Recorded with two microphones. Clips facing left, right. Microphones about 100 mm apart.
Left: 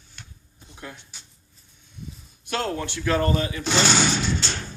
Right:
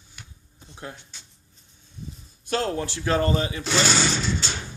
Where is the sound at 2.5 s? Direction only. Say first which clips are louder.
Right 2 dB; 30° right (ahead or behind).